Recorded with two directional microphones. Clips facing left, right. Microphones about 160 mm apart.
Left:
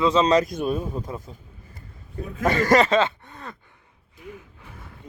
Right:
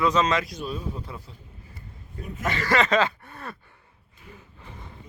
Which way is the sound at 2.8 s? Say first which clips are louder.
Left 2 dB; 25° left (ahead or behind).